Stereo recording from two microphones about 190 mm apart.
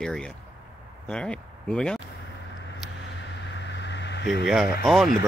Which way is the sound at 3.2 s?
70° left (ahead or behind).